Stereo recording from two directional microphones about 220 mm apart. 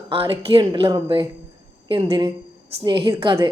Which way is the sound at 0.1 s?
25° right (ahead or behind).